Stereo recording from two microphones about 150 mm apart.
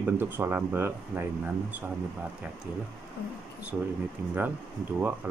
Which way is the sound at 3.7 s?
5° right (ahead or behind).